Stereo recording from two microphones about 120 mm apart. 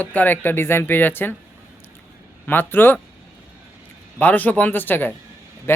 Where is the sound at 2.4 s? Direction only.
15° left (ahead or behind).